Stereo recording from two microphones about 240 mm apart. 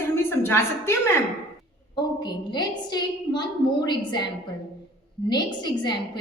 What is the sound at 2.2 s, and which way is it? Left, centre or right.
A woman's voice, centre.